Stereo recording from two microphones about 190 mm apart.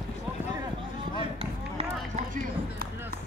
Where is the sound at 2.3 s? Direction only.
50° right (ahead or behind).